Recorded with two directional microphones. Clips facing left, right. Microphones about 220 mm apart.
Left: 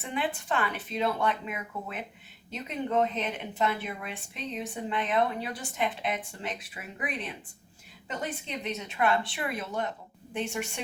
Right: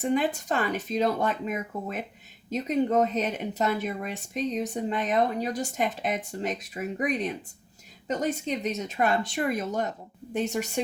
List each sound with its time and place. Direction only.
0.0 s speech: 45° right (ahead or behind)